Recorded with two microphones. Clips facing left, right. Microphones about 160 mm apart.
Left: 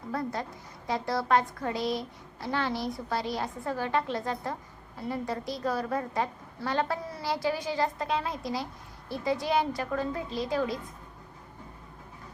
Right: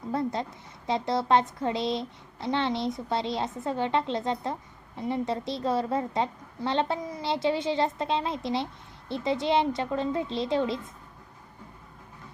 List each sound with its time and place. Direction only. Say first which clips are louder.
0.1 s a woman's voice: right 3 dB; 25° right (ahead or behind)